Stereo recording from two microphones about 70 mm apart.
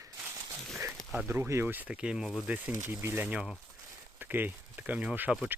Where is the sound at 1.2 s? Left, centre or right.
Right.